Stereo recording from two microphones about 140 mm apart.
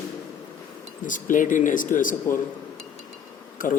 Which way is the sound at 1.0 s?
70° left (ahead or behind).